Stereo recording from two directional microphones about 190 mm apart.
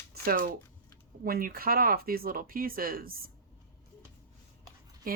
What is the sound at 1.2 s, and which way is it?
Speech, 50° right (ahead or behind).